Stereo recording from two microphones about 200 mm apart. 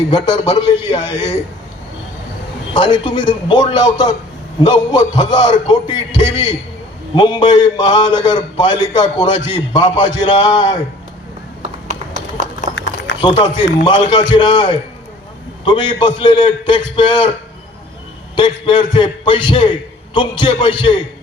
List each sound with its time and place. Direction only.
0.1 s a man's voice: 25° left (ahead or behind)
2.7 s a man's voice: 25° left (ahead or behind)
13.2 s a man's voice: 25° left (ahead or behind)
18.3 s a man's voice: 25° left (ahead or behind)